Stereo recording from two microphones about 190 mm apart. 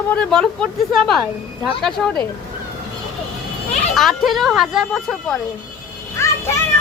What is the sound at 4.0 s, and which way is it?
Speech, centre (ahead or behind).